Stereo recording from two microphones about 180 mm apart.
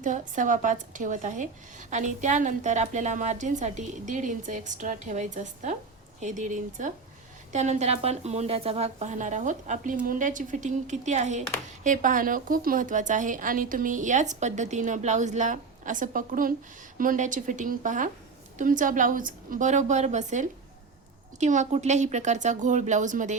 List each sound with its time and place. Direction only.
0.0 s a woman's voice: 45° right (ahead or behind)